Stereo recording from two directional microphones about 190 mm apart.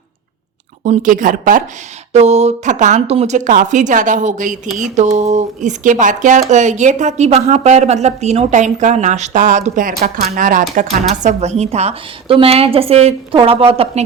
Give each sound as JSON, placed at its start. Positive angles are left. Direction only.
{"t": 0.9, "sound": "a woman's voice", "side_deg": -45}